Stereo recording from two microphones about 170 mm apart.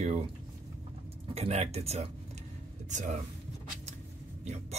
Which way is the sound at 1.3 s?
40° right (ahead or behind).